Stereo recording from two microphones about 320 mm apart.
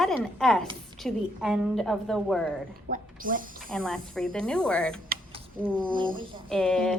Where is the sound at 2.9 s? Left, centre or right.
Right.